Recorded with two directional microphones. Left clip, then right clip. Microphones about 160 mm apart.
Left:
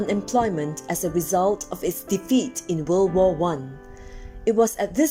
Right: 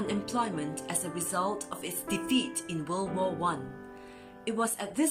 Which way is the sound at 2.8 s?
40° left (ahead or behind).